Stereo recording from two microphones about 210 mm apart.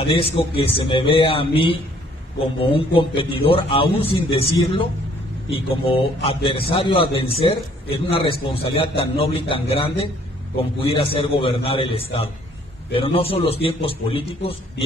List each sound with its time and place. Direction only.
0.0 s a man's voice: 25° left (ahead or behind)